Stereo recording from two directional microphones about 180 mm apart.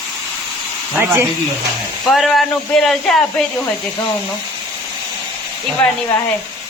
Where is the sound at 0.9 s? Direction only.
10° right (ahead or behind).